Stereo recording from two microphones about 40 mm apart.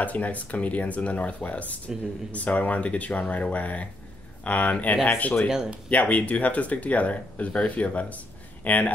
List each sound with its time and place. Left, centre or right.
0.0 s speech: left